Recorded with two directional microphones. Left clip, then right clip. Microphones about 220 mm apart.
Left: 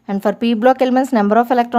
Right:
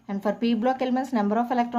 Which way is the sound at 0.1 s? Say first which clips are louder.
Left 8 dB; 35° left (ahead or behind).